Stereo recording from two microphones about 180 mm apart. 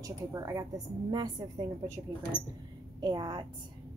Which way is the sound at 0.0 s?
20° right (ahead or behind).